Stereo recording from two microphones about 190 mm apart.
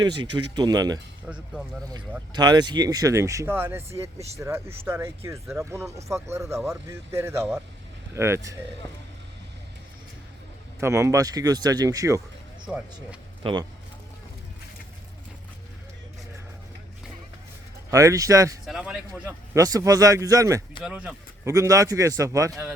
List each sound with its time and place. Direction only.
0.0 s a man's voice: 25° right (ahead or behind)
10.8 s speech: 15° right (ahead or behind)
12.6 s a man's voice: 5° right (ahead or behind)
13.4 s speech: 25° right (ahead or behind)
17.9 s a man's voice: 15° right (ahead or behind)
18.6 s a man's voice: 5° right (ahead or behind)
19.5 s a man's voice: 15° right (ahead or behind)
20.8 s a man's voice: 5° right (ahead or behind)
21.5 s a man's voice: 15° right (ahead or behind)